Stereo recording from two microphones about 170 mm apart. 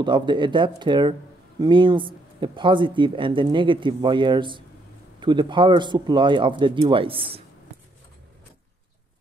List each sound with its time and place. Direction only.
0.0 s speech: 25° right (ahead or behind)